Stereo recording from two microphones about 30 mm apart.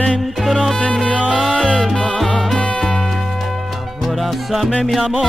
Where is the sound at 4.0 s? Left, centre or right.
Centre.